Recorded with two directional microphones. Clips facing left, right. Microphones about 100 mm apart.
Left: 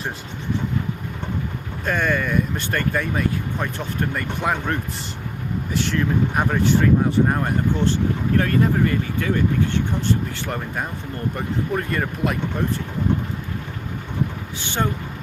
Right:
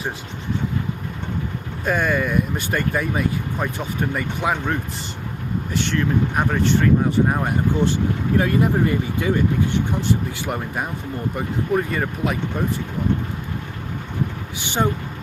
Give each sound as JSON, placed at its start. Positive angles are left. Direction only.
{"t": 1.8, "sound": "speech", "side_deg": -5}
{"t": 7.9, "sound": "speech", "side_deg": -15}
{"t": 14.6, "sound": "speech", "side_deg": -15}